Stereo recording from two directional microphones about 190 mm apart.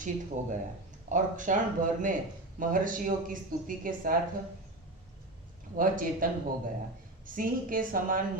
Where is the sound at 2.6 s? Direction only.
45° right (ahead or behind).